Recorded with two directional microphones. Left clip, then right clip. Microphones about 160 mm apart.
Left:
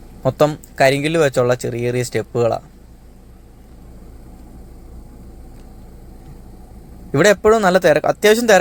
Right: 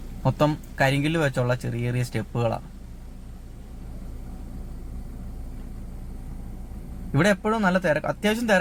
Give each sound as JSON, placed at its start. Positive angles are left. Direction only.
{"t": 0.2, "sound": "speech", "side_deg": 20}
{"t": 7.1, "sound": "speech", "side_deg": 25}